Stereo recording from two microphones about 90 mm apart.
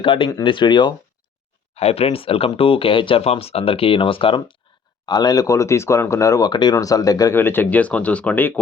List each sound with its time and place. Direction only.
0.0 s speech: 75° left (ahead or behind)
0.4 s speech: 60° left (ahead or behind)
1.9 s speech: 90° left
5.0 s speech: 50° left (ahead or behind)
6.5 s speech: 55° left (ahead or behind)
6.7 s speech: 40° left (ahead or behind)
7.3 s speech: 25° left (ahead or behind)